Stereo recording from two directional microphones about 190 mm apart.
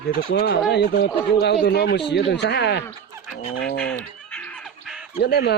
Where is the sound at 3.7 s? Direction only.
5° left (ahead or behind).